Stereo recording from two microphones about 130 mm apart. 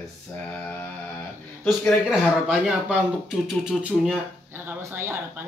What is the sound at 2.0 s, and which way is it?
Speech, 5° right (ahead or behind).